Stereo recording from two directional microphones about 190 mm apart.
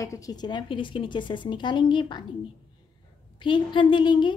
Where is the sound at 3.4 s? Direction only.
25° left (ahead or behind).